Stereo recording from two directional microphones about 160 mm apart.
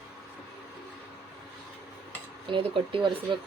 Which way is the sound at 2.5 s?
35° right (ahead or behind).